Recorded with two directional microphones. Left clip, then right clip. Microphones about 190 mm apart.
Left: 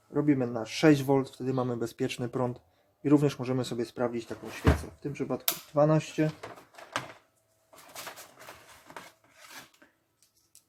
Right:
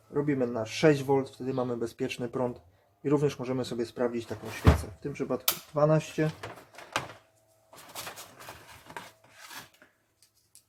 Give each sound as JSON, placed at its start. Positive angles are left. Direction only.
{"t": 0.1, "sound": "speech", "side_deg": 30}